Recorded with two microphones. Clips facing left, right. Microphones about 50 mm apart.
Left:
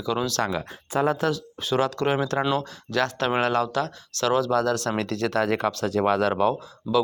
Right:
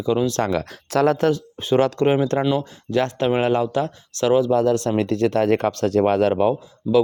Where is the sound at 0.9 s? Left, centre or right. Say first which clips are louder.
Right 5 dB; right.